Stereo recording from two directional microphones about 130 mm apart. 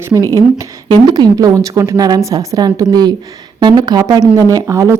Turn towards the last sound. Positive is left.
turn(degrees=-25)  # may be behind; listen again after turning